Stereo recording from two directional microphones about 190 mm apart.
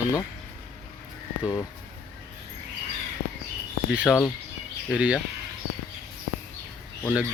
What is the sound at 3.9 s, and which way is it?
Speech, centre (ahead or behind).